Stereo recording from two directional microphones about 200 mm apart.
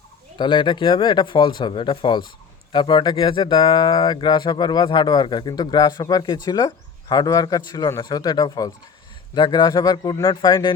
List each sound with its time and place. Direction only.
0.3 s speech: 25° left (ahead or behind)